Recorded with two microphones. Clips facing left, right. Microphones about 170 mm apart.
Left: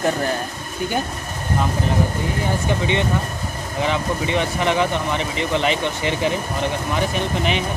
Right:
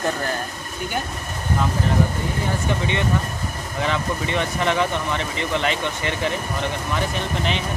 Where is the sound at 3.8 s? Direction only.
15° left (ahead or behind).